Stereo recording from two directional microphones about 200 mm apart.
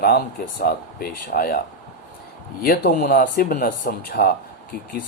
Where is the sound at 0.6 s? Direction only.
50° left (ahead or behind).